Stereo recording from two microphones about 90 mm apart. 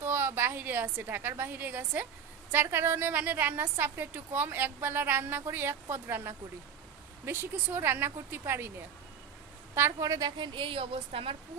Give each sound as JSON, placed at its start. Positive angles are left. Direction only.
{"t": 0.0, "sound": "a woman's voice", "side_deg": -25}
{"t": 10.0, "sound": "a woman's voice", "side_deg": -40}